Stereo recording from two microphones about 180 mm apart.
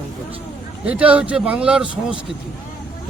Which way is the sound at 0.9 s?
5° right (ahead or behind).